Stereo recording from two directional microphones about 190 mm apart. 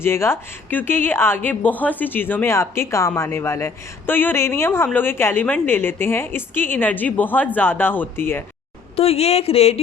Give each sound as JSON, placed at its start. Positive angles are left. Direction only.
{"t": 0.0, "sound": "speech", "side_deg": 15}
{"t": 9.0, "sound": "speech", "side_deg": 30}